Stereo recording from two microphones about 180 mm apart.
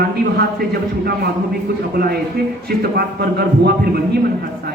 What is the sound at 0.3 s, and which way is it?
Speech, 60° right (ahead or behind).